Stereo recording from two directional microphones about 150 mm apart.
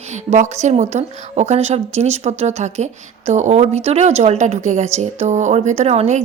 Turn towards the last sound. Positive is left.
turn(degrees=-50)  # may be behind; listen again after turning